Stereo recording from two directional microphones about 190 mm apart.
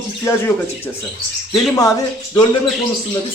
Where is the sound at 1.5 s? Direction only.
20° left (ahead or behind).